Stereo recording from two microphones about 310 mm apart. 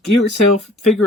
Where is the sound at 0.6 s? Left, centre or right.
Centre.